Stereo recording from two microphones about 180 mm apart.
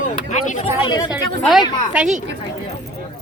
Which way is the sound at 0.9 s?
25° left (ahead or behind).